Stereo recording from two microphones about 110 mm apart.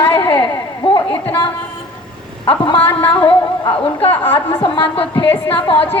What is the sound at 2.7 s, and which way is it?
Speech, 10° left (ahead or behind).